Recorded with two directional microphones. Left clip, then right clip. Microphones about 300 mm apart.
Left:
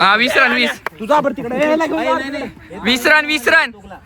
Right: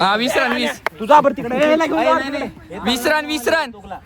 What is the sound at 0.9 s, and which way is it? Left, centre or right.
Speech, centre.